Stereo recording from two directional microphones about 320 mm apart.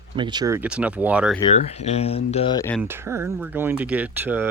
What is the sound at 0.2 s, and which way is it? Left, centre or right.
Speech, centre.